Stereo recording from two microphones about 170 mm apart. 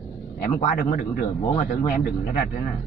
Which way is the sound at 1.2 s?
30° left (ahead or behind).